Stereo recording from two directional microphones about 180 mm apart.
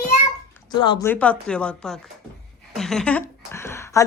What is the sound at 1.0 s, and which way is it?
Speech, 10° left (ahead or behind).